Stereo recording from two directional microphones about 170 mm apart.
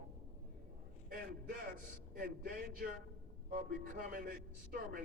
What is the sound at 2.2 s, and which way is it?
A man's voice, 60° right (ahead or behind).